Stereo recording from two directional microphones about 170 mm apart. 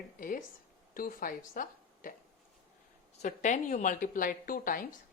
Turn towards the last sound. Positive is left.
turn(degrees=55)  # may be behind; listen again after turning